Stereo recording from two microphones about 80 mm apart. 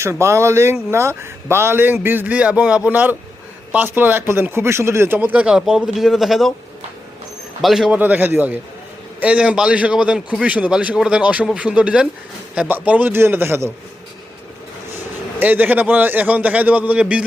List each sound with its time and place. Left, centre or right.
0.0 s a man's voice: right
5.3 s speech: centre
7.6 s speech: centre
7.9 s a man's voice: right
15.4 s a man's voice: right